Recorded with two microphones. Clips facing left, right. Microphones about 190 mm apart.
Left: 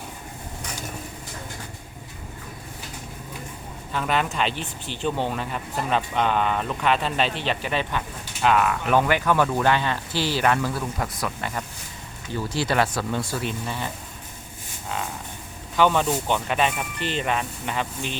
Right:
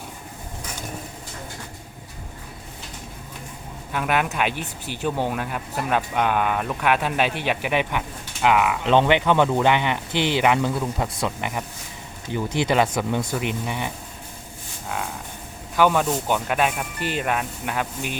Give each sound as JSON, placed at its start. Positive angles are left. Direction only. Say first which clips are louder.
{"t": 3.9, "sound": "speech", "louder": "right 1 dB", "side_deg": -10}
{"t": 15.7, "sound": "speech", "louder": "right 1 dB", "side_deg": -10}